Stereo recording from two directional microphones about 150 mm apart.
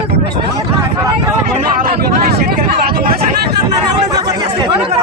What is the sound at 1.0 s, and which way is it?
Speech, 20° right (ahead or behind).